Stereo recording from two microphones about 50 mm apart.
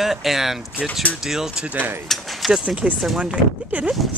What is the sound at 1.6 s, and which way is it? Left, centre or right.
Speech, right.